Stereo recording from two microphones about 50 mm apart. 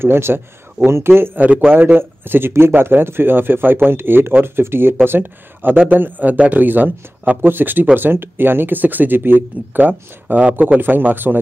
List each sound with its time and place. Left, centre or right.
0.0 s speech: right
1.4 s a man's voice: right
1.7 s speech: right